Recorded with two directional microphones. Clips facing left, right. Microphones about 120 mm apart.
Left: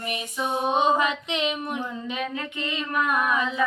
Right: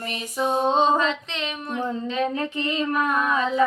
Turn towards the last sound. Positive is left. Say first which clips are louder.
# right 1 dB
turn(degrees=15)  # may be behind; listen again after turning